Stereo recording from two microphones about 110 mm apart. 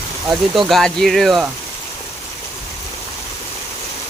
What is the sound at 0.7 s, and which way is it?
Speech, 5° left (ahead or behind).